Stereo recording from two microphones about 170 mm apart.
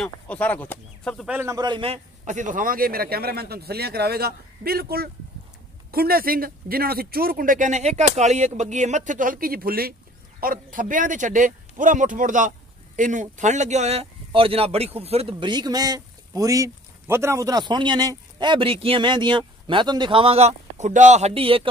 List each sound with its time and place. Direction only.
0.0 s speech: 10° left (ahead or behind)
1.3 s speech: 15° right (ahead or behind)
2.2 s speech: 45° right (ahead or behind)